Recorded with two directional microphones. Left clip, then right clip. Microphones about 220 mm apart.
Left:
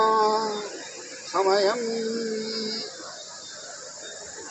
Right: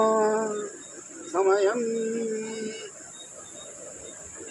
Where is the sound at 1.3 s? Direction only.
30° right (ahead or behind).